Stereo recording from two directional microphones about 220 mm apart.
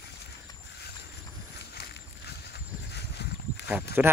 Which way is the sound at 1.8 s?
50° left (ahead or behind).